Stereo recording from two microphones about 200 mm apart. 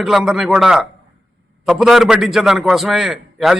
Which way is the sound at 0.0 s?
Centre (ahead or behind).